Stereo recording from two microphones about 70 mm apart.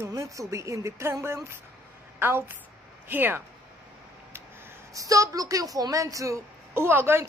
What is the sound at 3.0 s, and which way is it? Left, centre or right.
Music, right.